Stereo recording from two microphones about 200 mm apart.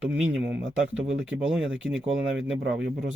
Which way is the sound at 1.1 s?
70° right (ahead or behind).